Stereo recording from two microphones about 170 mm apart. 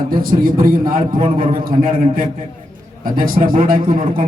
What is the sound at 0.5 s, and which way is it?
Speech, 55° right (ahead or behind).